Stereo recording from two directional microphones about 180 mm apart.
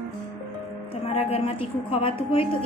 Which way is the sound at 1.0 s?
35° left (ahead or behind).